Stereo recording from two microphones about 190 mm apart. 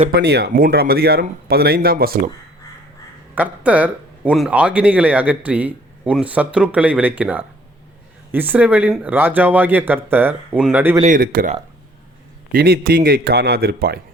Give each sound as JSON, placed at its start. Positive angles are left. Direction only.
{"t": 0.1, "sound": "speech", "side_deg": -60}
{"t": 3.3, "sound": "a man's voice", "side_deg": -10}
{"t": 11.0, "sound": "speech", "side_deg": -45}